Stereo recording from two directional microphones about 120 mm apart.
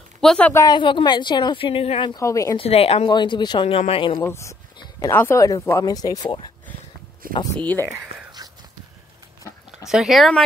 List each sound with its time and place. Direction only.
0.2 s a woman's voice: 5° left (ahead or behind)
0.7 s a woman's voice: 40° left (ahead or behind)
2.1 s speech: 25° left (ahead or behind)
2.5 s speech: 55° left (ahead or behind)
3.1 s a woman's voice: 40° left (ahead or behind); by 4.2 s 55° left (ahead or behind)
4.2 s speech: 25° left (ahead or behind)
7.5 s speech: 15° left (ahead or behind)
8.1 s whispering: 55° right (ahead or behind)
9.8 s speech: 5° right (ahead or behind)